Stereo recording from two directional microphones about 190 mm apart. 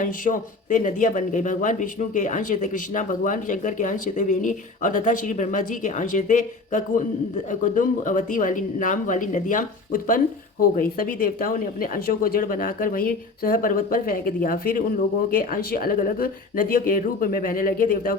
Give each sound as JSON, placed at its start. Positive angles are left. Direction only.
{"t": 0.0, "sound": "speech", "side_deg": 45}